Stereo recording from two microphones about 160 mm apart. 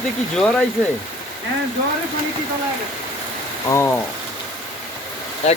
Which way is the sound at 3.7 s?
15° left (ahead or behind).